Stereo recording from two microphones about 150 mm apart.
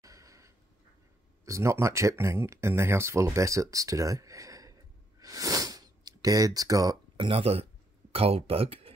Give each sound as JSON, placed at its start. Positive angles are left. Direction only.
{"t": 0.0, "sound": "a sound", "side_deg": -20}
{"t": 1.4, "sound": "speech", "side_deg": -20}
{"t": 5.2, "sound": "sniff", "side_deg": -25}
{"t": 7.2, "sound": "speech", "side_deg": -40}